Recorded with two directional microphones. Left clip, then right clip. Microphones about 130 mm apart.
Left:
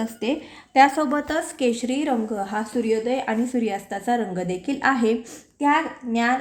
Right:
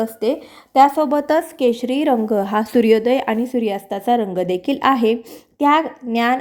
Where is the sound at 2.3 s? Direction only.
50° right (ahead or behind).